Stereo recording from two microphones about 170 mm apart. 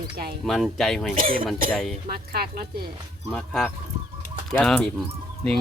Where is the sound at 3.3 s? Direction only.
5° left (ahead or behind).